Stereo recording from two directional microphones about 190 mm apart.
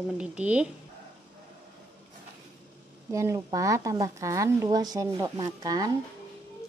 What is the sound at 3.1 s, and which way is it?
A woman's voice, 15° right (ahead or behind).